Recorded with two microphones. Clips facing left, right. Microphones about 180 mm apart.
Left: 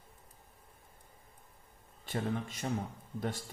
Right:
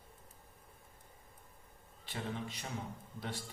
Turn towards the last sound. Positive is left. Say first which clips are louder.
# left 6 dB
turn(degrees=45)  # may be behind; listen again after turning